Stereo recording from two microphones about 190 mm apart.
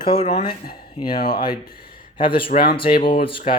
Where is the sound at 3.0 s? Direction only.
25° left (ahead or behind).